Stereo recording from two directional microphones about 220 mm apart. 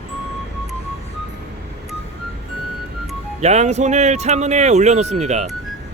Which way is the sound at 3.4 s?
30° right (ahead or behind).